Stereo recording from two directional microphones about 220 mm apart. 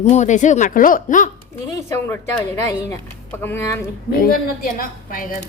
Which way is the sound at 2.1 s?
15° left (ahead or behind).